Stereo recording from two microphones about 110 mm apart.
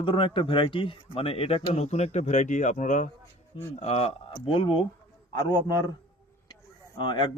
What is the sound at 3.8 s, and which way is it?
Speech, 75° left (ahead or behind).